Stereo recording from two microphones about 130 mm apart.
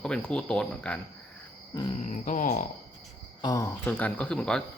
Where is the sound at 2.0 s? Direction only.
75° left (ahead or behind).